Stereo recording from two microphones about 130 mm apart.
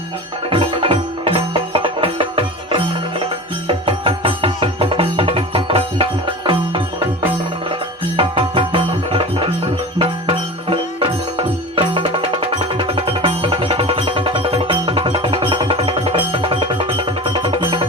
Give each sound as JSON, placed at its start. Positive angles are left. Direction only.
{"t": 0.5, "sound": "music", "side_deg": -45}
{"t": 8.1, "sound": "music", "side_deg": -40}